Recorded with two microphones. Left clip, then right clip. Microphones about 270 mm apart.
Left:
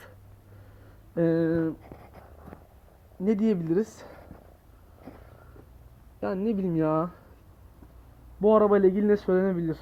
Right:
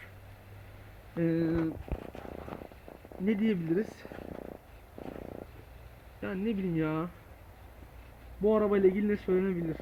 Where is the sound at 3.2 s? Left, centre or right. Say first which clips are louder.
Left 5 dB; centre.